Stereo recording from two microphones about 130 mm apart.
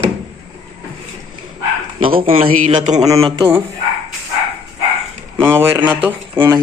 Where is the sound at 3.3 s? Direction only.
30° right (ahead or behind).